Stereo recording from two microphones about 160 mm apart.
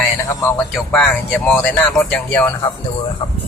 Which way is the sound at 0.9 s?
5° left (ahead or behind).